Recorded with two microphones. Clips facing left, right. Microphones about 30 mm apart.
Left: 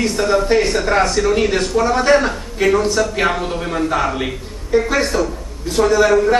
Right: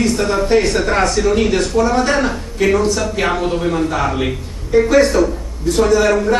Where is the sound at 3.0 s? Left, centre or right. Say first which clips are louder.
Even; centre.